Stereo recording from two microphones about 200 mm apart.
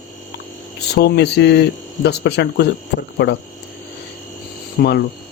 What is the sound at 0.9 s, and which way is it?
Speech, 55° left (ahead or behind).